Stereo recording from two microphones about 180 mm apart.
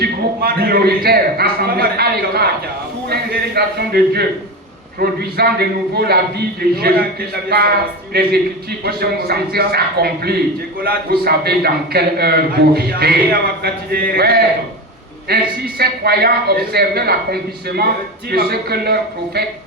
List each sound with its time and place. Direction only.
0.0 s a man's voice: 60° right (ahead or behind)
18.3 s a man's voice: 60° right (ahead or behind)